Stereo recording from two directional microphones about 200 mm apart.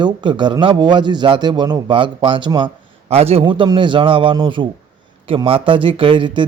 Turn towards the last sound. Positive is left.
turn(degrees=-25)  # may be behind; listen again after turning